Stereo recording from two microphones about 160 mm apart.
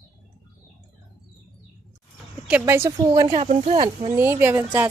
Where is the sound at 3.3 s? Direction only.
45° right (ahead or behind).